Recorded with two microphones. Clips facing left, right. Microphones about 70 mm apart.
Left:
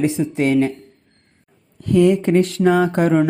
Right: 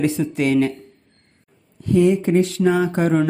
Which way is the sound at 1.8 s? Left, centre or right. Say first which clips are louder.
Left 2 dB; left.